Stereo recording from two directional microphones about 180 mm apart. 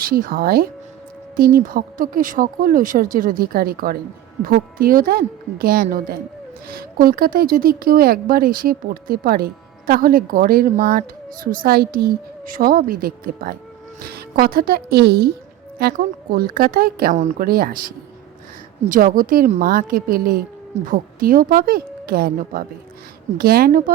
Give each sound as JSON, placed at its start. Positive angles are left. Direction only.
{"t": 0.0, "sound": "speech", "side_deg": -55}